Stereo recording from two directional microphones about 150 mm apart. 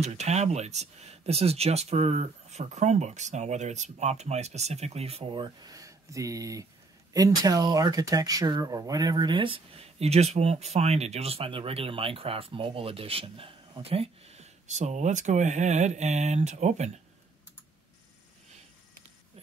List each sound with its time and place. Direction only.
0.0 s speech: 45° right (ahead or behind)